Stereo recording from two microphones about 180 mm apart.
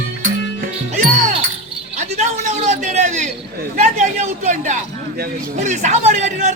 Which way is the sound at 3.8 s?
40° right (ahead or behind).